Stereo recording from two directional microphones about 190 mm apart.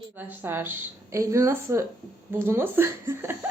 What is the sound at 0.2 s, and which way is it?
A woman's voice, 10° right (ahead or behind).